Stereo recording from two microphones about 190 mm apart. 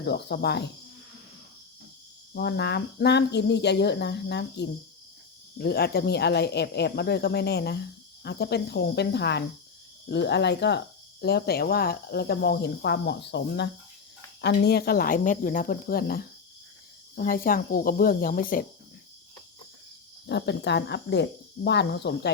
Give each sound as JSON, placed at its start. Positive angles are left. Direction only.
{"t": 0.0, "sound": "speech", "side_deg": 60}
{"t": 2.3, "sound": "speech", "side_deg": 60}
{"t": 20.2, "sound": "speech", "side_deg": 65}